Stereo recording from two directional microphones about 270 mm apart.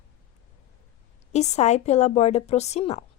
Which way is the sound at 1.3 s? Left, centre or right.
Left.